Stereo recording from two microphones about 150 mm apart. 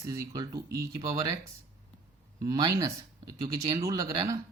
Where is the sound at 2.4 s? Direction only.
25° right (ahead or behind).